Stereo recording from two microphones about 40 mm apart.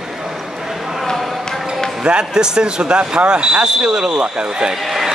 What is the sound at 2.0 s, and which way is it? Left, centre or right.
Speech, right.